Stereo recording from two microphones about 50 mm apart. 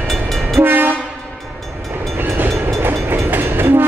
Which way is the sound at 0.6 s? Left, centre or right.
Right.